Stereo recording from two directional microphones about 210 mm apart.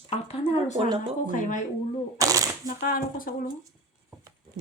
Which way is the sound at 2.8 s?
45° left (ahead or behind).